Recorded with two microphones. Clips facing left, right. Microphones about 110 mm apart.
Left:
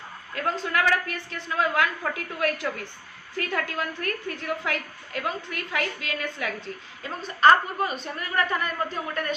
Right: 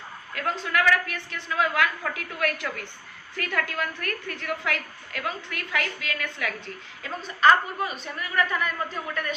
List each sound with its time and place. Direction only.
0.3 s a woman's voice: 30° left (ahead or behind)